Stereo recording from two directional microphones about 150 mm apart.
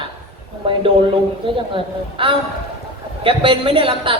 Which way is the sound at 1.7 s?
35° right (ahead or behind).